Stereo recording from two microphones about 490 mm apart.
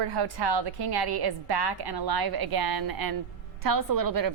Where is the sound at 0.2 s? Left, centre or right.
Right.